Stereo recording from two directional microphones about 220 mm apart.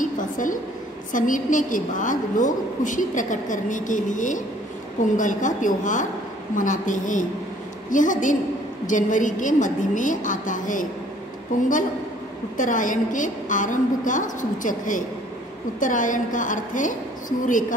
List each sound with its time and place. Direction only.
0.0 s a sound: 35° left (ahead or behind)
1.1 s a woman's voice: 35° left (ahead or behind)
12.5 s a woman's voice: 35° left (ahead or behind)